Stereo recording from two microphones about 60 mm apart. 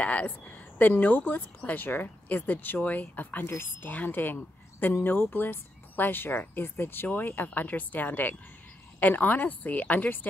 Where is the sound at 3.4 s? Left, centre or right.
Left.